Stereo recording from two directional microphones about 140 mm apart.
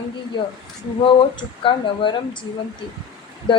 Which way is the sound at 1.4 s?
35° left (ahead or behind).